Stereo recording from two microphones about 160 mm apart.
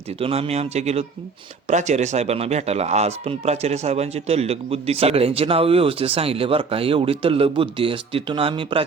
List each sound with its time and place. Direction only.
0.2 s speech: 35° right (ahead or behind)